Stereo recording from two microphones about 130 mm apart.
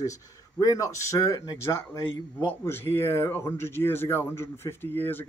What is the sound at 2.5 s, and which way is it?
Speech, 15° left (ahead or behind).